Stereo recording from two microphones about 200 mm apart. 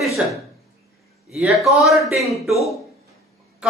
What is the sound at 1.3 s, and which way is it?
Speech, centre (ahead or behind).